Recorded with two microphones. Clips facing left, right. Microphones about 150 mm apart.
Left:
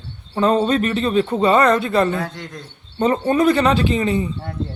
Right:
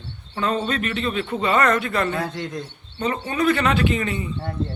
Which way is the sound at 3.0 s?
45° left (ahead or behind).